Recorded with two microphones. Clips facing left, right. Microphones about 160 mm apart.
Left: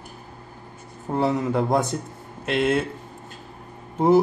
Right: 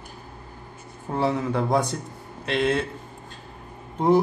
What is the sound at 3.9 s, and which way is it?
Speech, 5° left (ahead or behind).